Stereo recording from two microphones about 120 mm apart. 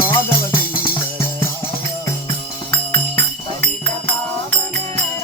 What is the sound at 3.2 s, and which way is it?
Music, 20° left (ahead or behind).